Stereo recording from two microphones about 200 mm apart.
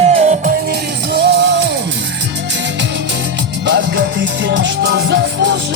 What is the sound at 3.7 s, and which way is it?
Music, 60° right (ahead or behind).